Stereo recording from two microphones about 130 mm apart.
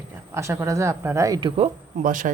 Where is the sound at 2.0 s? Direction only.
90° right.